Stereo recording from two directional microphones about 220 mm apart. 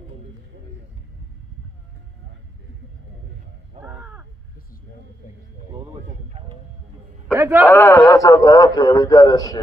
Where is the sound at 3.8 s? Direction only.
5° right (ahead or behind).